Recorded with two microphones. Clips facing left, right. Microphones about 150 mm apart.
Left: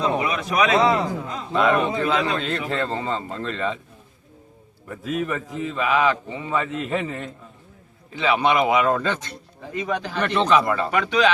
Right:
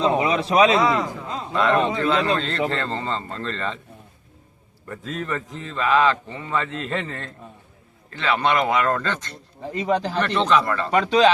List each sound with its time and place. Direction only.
0.0 s a sound: 25° right (ahead or behind)
1.5 s a man's voice: 5° left (ahead or behind)
4.9 s a man's voice: 10° left (ahead or behind)
9.7 s speech: 30° right (ahead or behind)
10.2 s speech: centre (ahead or behind)
10.9 s speech: 30° right (ahead or behind)